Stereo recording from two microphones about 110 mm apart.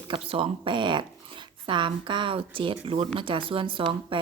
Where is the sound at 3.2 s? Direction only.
50° right (ahead or behind).